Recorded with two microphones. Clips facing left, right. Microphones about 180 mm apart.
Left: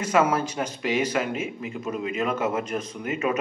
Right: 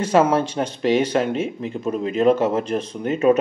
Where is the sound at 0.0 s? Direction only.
30° right (ahead or behind).